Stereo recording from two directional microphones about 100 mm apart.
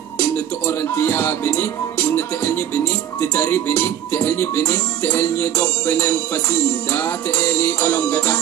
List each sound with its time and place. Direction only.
0.2 s music: 20° left (ahead or behind)